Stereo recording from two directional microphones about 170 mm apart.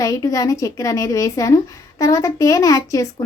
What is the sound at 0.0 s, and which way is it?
A woman's voice, 20° left (ahead or behind).